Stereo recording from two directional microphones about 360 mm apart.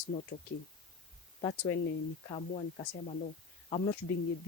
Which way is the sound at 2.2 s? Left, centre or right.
Centre.